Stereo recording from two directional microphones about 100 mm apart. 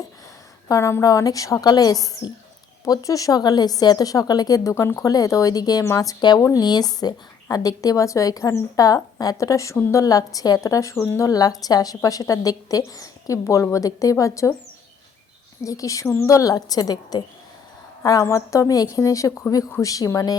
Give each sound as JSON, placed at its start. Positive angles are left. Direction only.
{"t": 0.7, "sound": "speech", "side_deg": 30}
{"t": 4.7, "sound": "speech", "side_deg": 30}
{"t": 15.6, "sound": "speech", "side_deg": 35}